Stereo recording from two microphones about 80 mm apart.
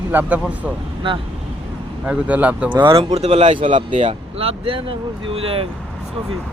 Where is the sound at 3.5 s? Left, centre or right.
Right.